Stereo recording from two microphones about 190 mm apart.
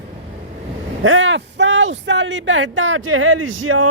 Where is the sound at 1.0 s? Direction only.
90° right.